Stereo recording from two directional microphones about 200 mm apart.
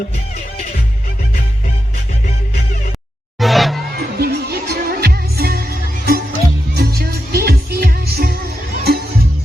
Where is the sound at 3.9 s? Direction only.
50° right (ahead or behind).